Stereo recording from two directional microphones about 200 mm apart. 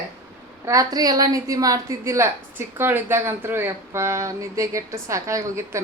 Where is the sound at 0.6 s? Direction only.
15° right (ahead or behind).